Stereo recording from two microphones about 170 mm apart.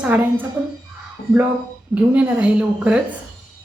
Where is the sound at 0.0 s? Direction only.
10° right (ahead or behind).